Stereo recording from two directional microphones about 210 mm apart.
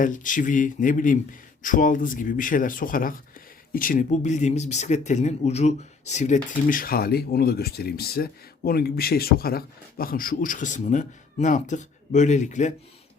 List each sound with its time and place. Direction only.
0.0 s speech: 40° left (ahead or behind)